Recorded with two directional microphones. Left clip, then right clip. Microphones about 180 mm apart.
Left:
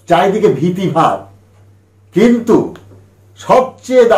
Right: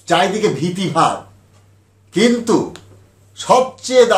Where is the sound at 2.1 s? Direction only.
10° right (ahead or behind).